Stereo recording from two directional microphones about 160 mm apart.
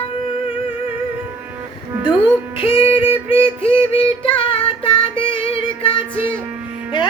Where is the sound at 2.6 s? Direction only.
35° left (ahead or behind).